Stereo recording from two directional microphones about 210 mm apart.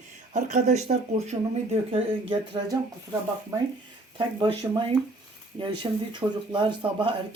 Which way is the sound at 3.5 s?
15° right (ahead or behind).